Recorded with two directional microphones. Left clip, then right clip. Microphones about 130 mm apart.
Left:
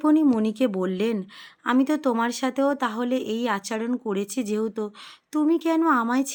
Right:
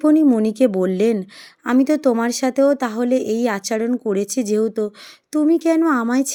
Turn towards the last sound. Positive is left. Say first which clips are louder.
# right 3 dB
turn(degrees=-30)  # may be behind; listen again after turning